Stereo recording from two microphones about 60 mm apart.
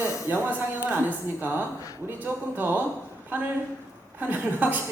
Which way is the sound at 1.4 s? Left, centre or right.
Right.